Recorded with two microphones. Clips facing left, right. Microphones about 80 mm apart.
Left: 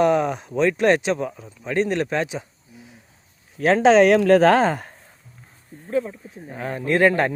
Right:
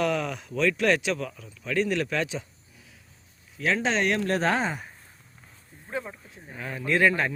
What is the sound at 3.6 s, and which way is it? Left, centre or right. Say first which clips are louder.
Speech: left 11 dB; left.